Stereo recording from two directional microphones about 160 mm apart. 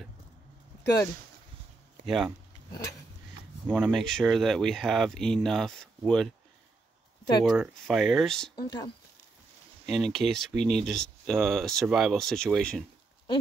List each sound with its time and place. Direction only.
2.0 s speech: centre (ahead or behind)
3.6 s speech: 10° right (ahead or behind)
3.9 s speech: centre (ahead or behind)
7.4 s speech: 5° right (ahead or behind)
8.5 s speech: 25° left (ahead or behind)
9.8 s speech: centre (ahead or behind)